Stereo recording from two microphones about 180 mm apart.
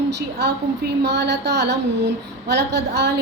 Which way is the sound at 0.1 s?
65° right (ahead or behind).